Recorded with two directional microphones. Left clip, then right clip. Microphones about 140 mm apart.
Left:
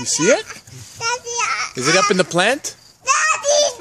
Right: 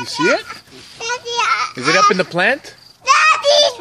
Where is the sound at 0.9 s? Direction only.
20° right (ahead or behind).